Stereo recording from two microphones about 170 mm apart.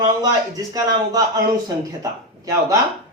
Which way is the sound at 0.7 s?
25° right (ahead or behind).